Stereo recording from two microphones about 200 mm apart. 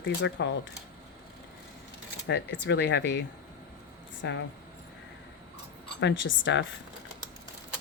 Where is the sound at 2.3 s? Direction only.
60° left (ahead or behind).